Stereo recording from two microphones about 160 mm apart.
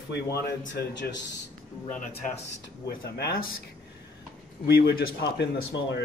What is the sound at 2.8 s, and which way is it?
Speech, 80° left.